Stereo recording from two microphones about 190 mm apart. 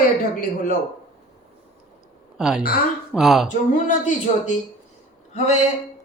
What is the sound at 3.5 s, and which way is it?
Speech, 40° left (ahead or behind).